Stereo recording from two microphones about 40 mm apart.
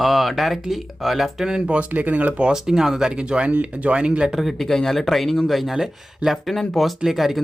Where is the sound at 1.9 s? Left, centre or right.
Right.